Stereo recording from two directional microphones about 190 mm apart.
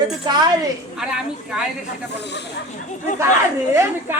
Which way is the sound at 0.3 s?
20° right (ahead or behind).